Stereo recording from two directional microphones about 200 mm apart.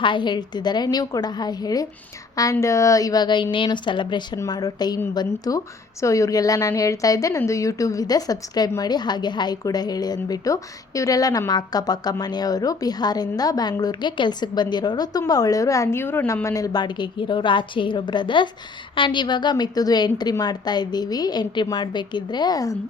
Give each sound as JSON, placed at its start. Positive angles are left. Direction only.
{"t": 0.0, "sound": "a woman's voice", "side_deg": 25}